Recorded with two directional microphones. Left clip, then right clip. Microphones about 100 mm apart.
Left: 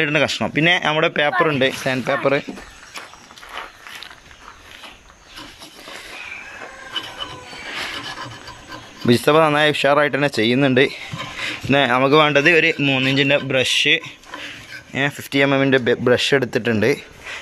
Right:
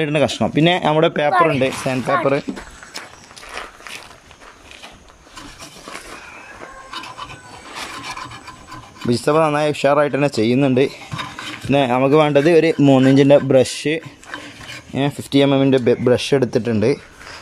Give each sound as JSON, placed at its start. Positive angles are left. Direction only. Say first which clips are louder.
{"t": 0.0, "sound": "speech", "louder": "right 1 dB", "side_deg": -25}
{"t": 0.7, "sound": "speech", "louder": "right 1 dB", "side_deg": -35}
{"t": 1.1, "sound": "speech", "louder": "right 2 dB", "side_deg": -15}
{"t": 9.0, "sound": "speech", "louder": "left 2 dB", "side_deg": -15}
{"t": 12.7, "sound": "speech", "louder": "right 5 dB", "side_deg": -90}